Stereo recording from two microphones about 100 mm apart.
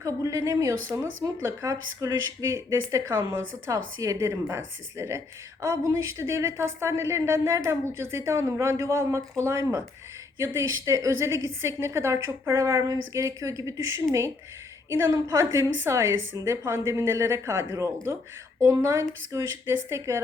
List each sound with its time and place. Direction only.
0.0 s speech: 30° right (ahead or behind)